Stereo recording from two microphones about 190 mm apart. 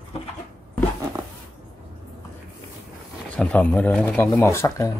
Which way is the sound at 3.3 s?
5° left (ahead or behind).